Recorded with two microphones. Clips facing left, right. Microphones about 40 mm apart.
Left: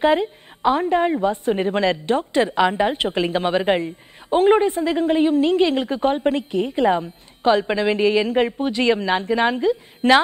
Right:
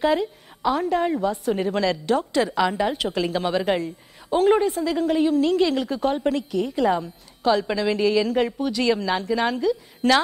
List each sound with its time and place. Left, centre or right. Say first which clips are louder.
0.0 s a woman's voice: left 3 dB; left